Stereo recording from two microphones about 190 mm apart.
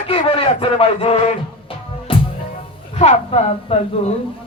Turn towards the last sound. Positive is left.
turn(degrees=35)  # may be behind; listen again after turning